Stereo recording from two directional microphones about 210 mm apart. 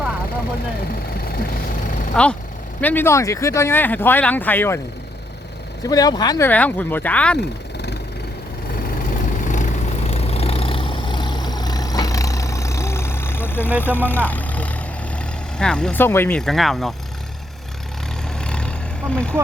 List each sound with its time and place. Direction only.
2.2 s speech: 5° left (ahead or behind)
5.8 s speech: 15° left (ahead or behind)
9.5 s vehicle: 35° left (ahead or behind); by 13.7 s 10° left (ahead or behind)
13.8 s speech: 10° left (ahead or behind)
18.3 s vehicle: 5° left (ahead or behind)